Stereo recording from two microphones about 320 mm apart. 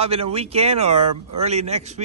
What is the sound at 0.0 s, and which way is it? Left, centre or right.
Speech, centre.